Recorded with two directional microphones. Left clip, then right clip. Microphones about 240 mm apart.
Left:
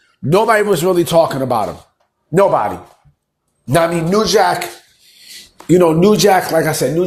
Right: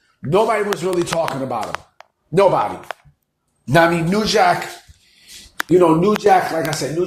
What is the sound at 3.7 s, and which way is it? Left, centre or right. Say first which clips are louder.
Speech: left 1 dB; centre.